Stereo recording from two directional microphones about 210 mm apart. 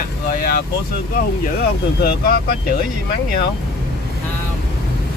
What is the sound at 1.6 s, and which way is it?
Speech, 45° left (ahead or behind).